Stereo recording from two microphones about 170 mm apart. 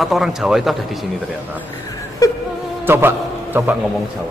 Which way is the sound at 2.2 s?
20° left (ahead or behind).